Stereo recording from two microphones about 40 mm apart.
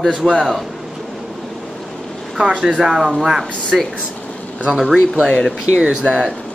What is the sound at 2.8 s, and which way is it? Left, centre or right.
Speech, centre.